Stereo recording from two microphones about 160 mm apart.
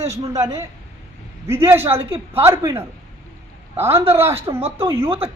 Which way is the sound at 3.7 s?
15° right (ahead or behind).